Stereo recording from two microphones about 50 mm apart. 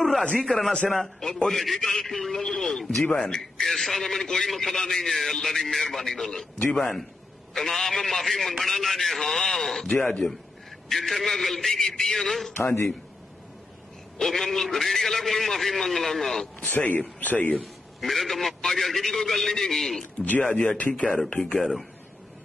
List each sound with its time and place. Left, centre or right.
0.5 s a man's voice: centre
12.5 s a man's voice: left
14.1 s a man's voice: centre
16.6 s speech: left
18.0 s a man's voice: centre
20.5 s speech: left
21.4 s a man's voice: centre